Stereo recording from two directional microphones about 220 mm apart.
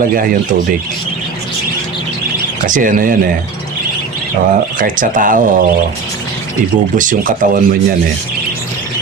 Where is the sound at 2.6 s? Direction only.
35° right (ahead or behind).